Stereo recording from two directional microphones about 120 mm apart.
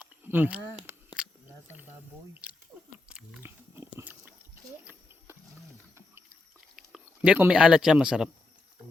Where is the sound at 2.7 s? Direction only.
10° right (ahead or behind).